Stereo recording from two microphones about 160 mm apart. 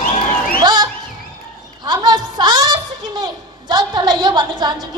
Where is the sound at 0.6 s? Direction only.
25° right (ahead or behind).